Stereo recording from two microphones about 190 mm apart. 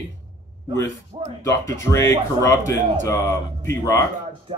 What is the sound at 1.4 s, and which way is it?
Speech, 15° left (ahead or behind).